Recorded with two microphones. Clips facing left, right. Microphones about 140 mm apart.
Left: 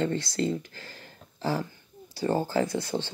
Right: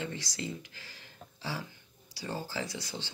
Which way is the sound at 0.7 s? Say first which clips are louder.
Left 7 dB; 50° left (ahead or behind).